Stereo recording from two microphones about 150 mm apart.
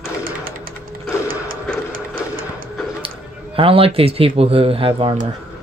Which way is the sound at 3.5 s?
40° right (ahead or behind).